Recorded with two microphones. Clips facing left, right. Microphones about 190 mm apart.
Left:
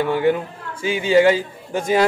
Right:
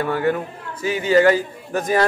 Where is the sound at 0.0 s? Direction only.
20° left (ahead or behind).